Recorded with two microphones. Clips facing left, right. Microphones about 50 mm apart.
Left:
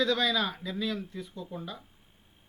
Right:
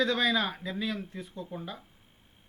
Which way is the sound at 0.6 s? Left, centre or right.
Right.